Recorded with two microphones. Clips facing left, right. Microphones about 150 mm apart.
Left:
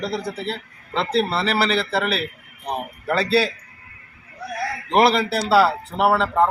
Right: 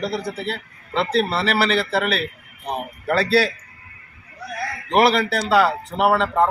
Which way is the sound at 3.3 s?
20° left (ahead or behind).